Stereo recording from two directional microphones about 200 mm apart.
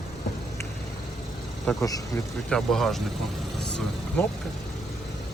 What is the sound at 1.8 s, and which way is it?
Speech, 15° left (ahead or behind).